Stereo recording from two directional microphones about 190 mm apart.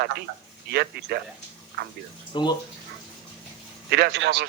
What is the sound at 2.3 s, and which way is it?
Speech, 25° left (ahead or behind).